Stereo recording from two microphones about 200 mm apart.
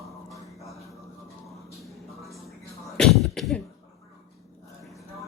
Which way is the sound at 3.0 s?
Centre (ahead or behind).